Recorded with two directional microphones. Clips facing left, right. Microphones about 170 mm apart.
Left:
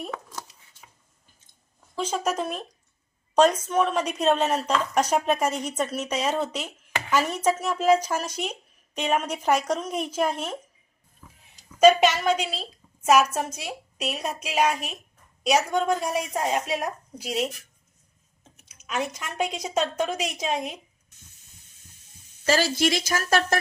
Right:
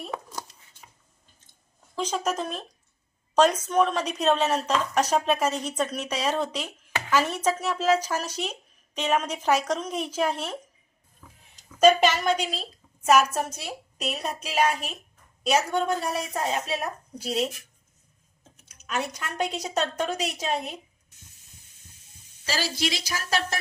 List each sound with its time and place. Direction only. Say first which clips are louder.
2.0 s speech: left 1 dB; 10° left (ahead or behind)
11.8 s speech: left 2 dB; 10° left (ahead or behind)
18.6 s speech: left 1 dB; 10° left (ahead or behind)
22.4 s a woman's voice: left 7 dB; 50° left (ahead or behind)